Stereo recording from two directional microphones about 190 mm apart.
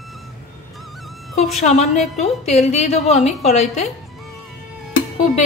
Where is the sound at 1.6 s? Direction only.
40° left (ahead or behind).